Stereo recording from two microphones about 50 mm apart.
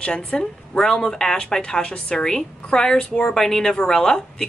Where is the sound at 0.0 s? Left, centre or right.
Left.